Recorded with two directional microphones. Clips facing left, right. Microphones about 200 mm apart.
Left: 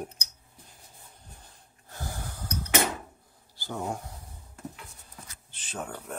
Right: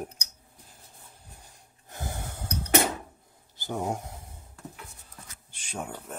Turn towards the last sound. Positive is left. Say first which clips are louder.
# even
turn(degrees=-5)  # may be behind; listen again after turning